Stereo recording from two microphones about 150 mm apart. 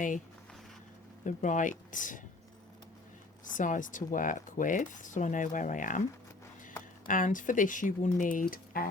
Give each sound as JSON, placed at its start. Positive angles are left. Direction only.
{"t": 1.2, "sound": "speech", "side_deg": 60}
{"t": 3.5, "sound": "speech", "side_deg": 60}
{"t": 7.1, "sound": "speech", "side_deg": 60}